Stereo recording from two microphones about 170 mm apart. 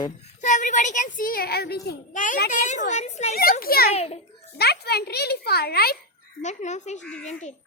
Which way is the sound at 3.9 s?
35° left (ahead or behind).